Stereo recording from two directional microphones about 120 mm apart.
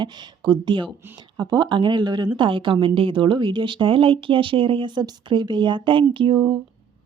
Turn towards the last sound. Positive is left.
turn(degrees=-45)  # may be behind; listen again after turning